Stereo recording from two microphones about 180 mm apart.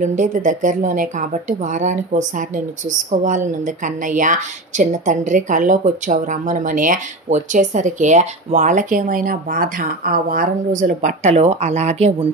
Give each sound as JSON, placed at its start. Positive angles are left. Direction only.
{"t": 0.0, "sound": "a woman's voice", "side_deg": -45}